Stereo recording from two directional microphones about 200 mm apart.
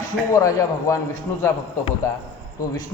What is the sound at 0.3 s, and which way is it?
A man's voice, 15° left (ahead or behind).